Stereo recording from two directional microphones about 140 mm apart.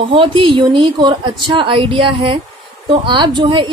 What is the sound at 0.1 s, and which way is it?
A woman's voice, 40° right (ahead or behind).